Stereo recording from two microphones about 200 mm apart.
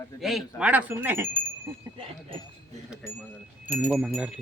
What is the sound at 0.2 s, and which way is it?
Speech, centre (ahead or behind).